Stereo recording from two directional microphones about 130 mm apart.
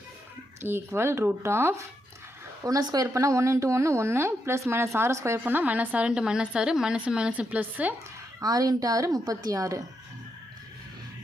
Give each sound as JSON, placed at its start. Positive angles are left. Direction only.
{"t": 0.6, "sound": "a woman's voice", "side_deg": -20}
{"t": 8.4, "sound": "speech", "side_deg": -30}